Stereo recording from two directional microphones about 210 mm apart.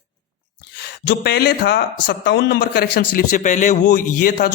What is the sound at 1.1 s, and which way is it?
A man's voice, 50° left (ahead or behind).